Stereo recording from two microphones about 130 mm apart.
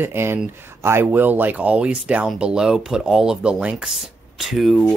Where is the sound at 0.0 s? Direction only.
20° right (ahead or behind).